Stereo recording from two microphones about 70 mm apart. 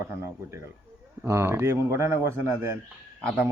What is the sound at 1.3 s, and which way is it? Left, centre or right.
Speech, right.